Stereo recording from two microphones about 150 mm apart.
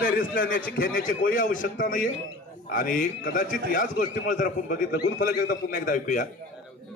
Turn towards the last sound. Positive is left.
turn(degrees=60)  # may be behind; listen again after turning